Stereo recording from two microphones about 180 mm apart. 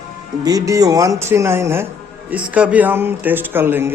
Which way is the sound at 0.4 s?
20° right (ahead or behind).